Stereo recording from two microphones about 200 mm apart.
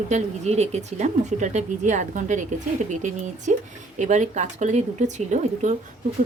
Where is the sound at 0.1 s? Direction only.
35° right (ahead or behind).